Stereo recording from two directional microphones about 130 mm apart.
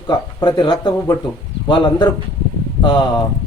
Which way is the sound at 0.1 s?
35° left (ahead or behind).